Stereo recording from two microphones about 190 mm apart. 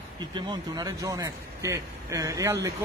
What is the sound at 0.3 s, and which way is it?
A man's voice, 20° right (ahead or behind).